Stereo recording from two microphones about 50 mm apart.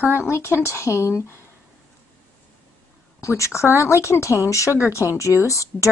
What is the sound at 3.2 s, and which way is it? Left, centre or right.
Speech, left.